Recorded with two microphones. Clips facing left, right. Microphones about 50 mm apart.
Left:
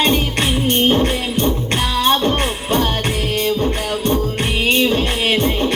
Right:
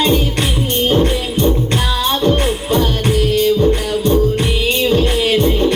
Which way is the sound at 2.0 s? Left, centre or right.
Left.